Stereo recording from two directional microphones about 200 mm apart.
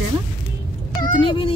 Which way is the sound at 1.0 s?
25° left (ahead or behind).